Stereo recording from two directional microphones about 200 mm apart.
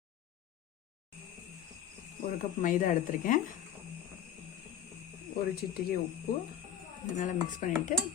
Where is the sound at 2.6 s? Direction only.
40° left (ahead or behind).